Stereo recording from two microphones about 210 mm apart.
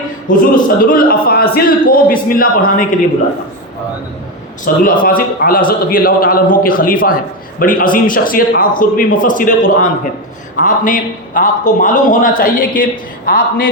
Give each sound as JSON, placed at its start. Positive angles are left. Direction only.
{"t": 0.5, "sound": "a man's voice", "side_deg": 40}
{"t": 4.7, "sound": "a man's voice", "side_deg": 45}